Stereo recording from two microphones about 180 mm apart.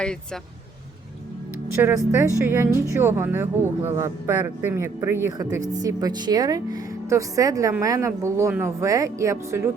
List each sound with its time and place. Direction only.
1.8 s speech: 10° right (ahead or behind)